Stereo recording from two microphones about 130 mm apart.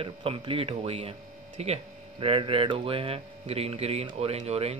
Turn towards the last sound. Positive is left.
turn(degrees=-55)  # may be behind; listen again after turning